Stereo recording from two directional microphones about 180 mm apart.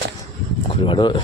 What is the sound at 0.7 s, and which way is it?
Speech, 25° left (ahead or behind).